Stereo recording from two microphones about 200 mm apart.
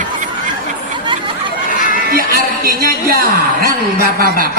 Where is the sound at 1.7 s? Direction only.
40° left (ahead or behind).